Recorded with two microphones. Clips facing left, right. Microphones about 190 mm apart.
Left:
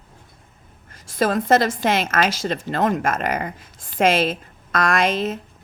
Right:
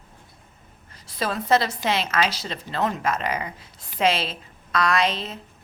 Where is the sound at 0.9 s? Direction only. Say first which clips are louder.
Left 7 dB; 45° left (ahead or behind).